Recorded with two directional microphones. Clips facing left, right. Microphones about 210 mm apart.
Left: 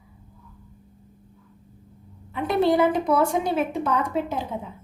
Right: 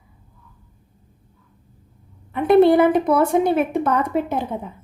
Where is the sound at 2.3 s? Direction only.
55° right (ahead or behind).